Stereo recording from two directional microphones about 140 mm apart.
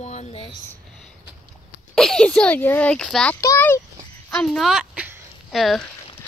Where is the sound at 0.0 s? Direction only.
55° left (ahead or behind).